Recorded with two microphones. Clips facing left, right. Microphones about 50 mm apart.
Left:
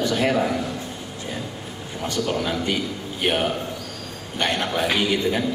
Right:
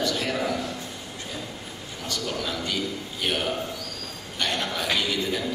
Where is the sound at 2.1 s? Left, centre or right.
Left.